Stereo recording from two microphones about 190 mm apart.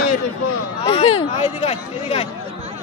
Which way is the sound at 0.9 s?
30° left (ahead or behind).